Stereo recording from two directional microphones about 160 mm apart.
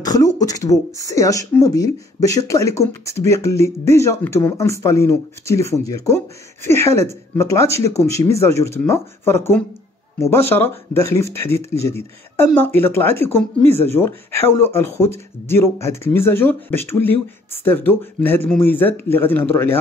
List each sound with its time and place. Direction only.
0.0 s speech: 25° left (ahead or behind)